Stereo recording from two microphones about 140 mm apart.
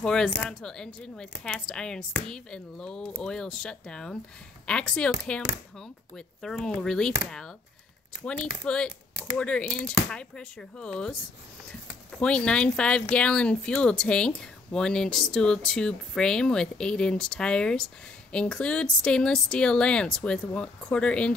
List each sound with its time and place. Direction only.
0.0 s a woman's voice: 5° left (ahead or behind)
12.2 s a woman's voice: 5° left (ahead or behind)